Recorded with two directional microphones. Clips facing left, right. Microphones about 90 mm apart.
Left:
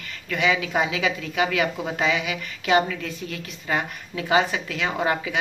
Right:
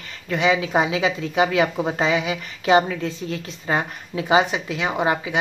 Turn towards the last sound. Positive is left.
turn(degrees=-20)  # may be behind; listen again after turning